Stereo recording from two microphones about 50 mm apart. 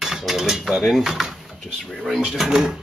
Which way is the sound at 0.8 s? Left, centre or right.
Centre.